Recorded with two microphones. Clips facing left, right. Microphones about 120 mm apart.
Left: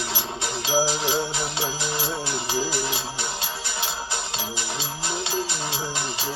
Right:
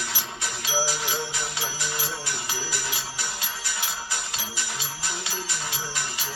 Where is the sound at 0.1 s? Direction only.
25° left (ahead or behind).